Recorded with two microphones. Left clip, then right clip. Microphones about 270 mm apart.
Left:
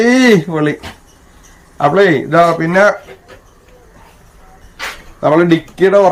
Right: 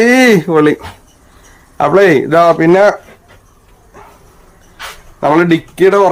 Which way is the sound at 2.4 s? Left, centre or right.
Right.